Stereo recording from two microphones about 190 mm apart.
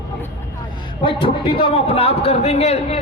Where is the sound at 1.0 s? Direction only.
25° left (ahead or behind).